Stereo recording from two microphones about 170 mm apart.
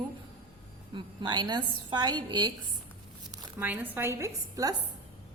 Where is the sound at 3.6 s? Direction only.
10° right (ahead or behind).